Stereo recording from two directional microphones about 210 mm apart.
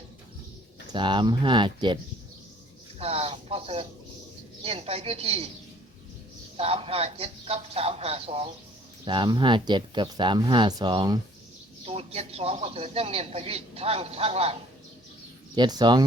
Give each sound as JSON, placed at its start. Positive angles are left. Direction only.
{"t": 0.9, "sound": "a man's voice", "side_deg": -20}
{"t": 3.0, "sound": "a man's voice", "side_deg": -30}
{"t": 6.6, "sound": "a man's voice", "side_deg": -25}
{"t": 15.5, "sound": "a man's voice", "side_deg": -20}